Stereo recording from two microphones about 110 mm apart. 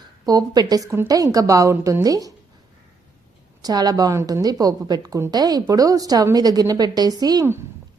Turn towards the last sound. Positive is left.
turn(degrees=-35)  # may be behind; listen again after turning